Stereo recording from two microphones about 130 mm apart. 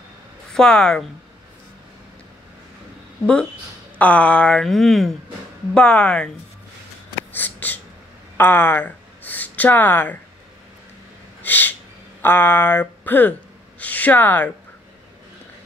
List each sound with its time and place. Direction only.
0.5 s speech: 5° left (ahead or behind)
4.0 s speech: 10° left (ahead or behind)
7.3 s a sound: 15° left (ahead or behind)
8.4 s speech: 15° left (ahead or behind)
11.4 s a sound: 15° left (ahead or behind)
12.2 s speech: 15° left (ahead or behind)